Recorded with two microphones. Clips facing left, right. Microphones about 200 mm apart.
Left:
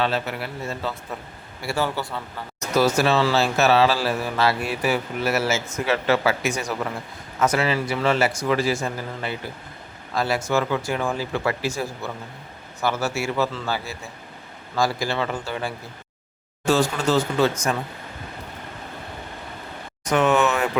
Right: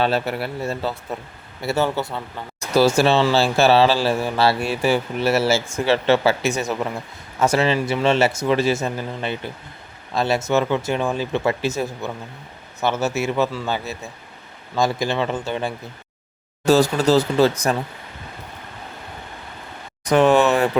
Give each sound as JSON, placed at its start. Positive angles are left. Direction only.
{"t": 0.0, "sound": "speech", "side_deg": -35}
{"t": 16.6, "sound": "speech", "side_deg": -40}
{"t": 20.1, "sound": "speech", "side_deg": -35}